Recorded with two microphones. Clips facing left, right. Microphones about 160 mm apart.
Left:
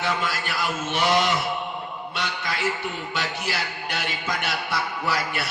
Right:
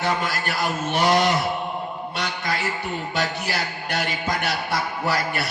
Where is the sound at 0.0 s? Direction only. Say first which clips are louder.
Right 2 dB; 40° right (ahead or behind).